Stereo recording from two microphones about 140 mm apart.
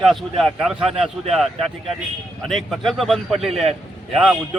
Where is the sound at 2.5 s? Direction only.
Centre (ahead or behind).